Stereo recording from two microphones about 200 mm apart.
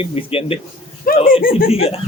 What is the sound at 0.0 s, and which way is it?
Speech, 30° left (ahead or behind).